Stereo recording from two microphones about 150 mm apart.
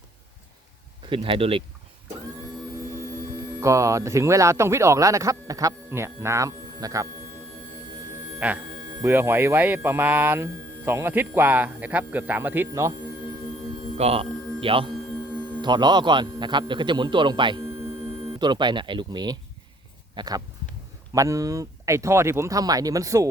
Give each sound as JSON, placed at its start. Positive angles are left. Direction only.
{"t": 1.1, "sound": "speech", "side_deg": -35}
{"t": 3.6, "sound": "speech", "side_deg": -20}
{"t": 8.4, "sound": "a man's voice", "side_deg": -10}
{"t": 13.9, "sound": "a sound", "side_deg": -40}
{"t": 15.6, "sound": "speech", "side_deg": -30}